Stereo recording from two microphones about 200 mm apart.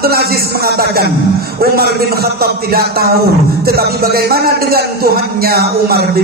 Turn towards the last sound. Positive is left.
turn(degrees=-50)  # may be behind; listen again after turning